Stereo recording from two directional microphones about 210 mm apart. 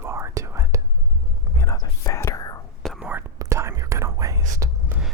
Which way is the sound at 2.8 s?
Centre (ahead or behind).